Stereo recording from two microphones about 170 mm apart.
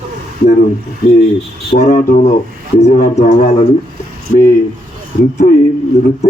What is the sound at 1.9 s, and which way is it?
Speech, 55° left (ahead or behind).